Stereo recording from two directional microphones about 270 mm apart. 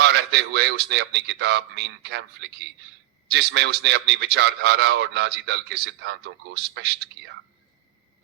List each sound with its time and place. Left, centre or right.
0.0 s a man's voice: right